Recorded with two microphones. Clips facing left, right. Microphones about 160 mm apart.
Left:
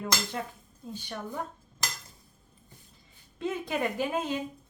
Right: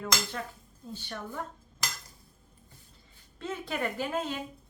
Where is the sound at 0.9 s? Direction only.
15° left (ahead or behind).